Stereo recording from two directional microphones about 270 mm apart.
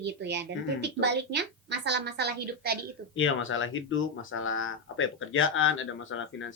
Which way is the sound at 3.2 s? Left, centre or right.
Left.